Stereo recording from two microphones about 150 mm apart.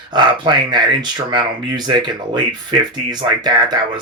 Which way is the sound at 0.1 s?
30° right (ahead or behind).